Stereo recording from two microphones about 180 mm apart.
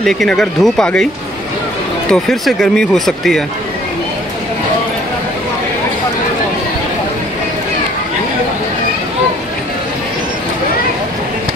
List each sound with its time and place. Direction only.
0.0 s speech: centre (ahead or behind)
2.0 s speech: centre (ahead or behind)